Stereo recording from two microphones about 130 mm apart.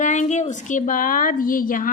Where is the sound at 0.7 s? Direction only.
85° left.